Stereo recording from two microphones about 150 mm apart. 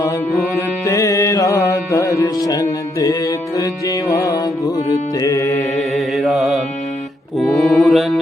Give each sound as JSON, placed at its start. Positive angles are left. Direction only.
{"t": 0.5, "sound": "music", "side_deg": 20}
{"t": 5.9, "sound": "mantra", "side_deg": 0}